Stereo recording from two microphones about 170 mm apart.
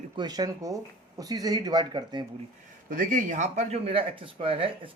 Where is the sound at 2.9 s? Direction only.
50° right (ahead or behind).